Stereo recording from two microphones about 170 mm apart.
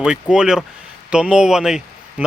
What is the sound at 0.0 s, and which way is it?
Speech, 5° right (ahead or behind).